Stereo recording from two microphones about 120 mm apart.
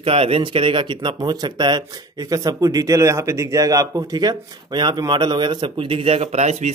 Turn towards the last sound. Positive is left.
turn(degrees=-70)  # may be behind; listen again after turning